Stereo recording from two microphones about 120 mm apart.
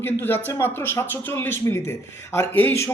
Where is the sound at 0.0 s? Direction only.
15° left (ahead or behind).